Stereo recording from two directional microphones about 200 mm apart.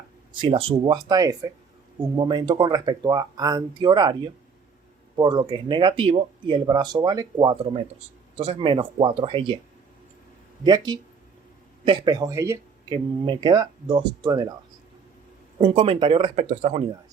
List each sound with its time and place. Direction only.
0.3 s speech: 25° right (ahead or behind)
10.6 s speech: 20° right (ahead or behind)
15.6 s speech: 30° right (ahead or behind)